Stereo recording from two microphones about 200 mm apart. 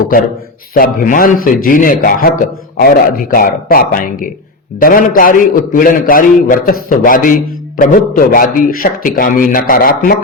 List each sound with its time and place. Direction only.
0.7 s a man's voice: 45° left (ahead or behind)